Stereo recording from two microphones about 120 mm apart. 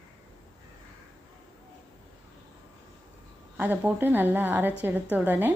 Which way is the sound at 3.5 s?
15° right (ahead or behind).